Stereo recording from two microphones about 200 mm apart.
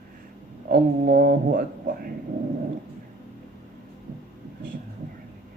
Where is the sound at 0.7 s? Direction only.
50° right (ahead or behind).